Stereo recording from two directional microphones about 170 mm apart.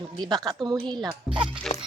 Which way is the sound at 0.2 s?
25° right (ahead or behind).